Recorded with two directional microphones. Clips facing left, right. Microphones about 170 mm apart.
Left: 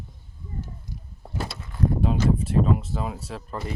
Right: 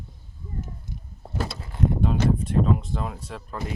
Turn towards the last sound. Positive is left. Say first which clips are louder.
# left 2 dB
turn(degrees=5)  # may be behind; listen again after turning